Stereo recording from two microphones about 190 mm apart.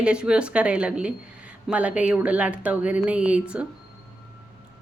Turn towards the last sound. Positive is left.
turn(degrees=-5)  # may be behind; listen again after turning